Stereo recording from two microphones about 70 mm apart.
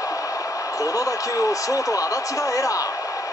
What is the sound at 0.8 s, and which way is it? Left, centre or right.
Speech, left.